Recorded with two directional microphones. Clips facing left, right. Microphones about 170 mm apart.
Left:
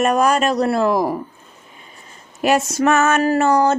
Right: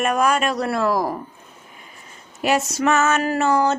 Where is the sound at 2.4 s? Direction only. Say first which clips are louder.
Left 3 dB; 50° left (ahead or behind).